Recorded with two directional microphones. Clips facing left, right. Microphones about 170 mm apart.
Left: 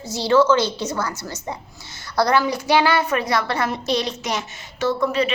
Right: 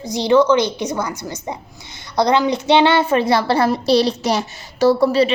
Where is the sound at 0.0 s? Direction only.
15° right (ahead or behind).